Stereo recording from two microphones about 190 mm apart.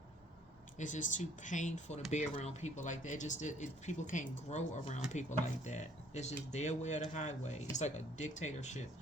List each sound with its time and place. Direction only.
0.8 s speech: 40° left (ahead or behind)